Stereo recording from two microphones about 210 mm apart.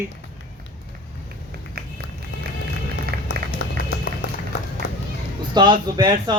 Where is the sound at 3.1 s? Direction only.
50° right (ahead or behind).